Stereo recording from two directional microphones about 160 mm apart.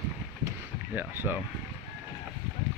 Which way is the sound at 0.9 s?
10° right (ahead or behind).